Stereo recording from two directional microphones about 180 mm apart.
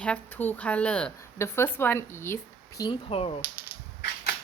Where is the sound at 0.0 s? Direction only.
10° left (ahead or behind); by 3.4 s 35° left (ahead or behind).